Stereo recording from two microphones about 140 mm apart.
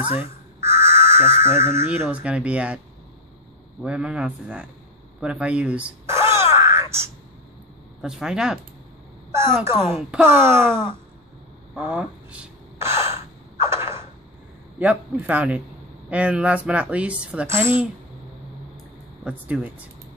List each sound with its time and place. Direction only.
0.2 s speech: 20° right (ahead or behind)
3.8 s speech: 10° right (ahead or behind)
5.2 s a sound: 10° right (ahead or behind)
8.0 s speech: 5° right (ahead or behind)
9.3 s a woman's voice: 20° right (ahead or behind)
11.7 s a sound: 10° right (ahead or behind)
14.8 s speech: 10° right (ahead or behind)
19.2 s speech: 10° right (ahead or behind)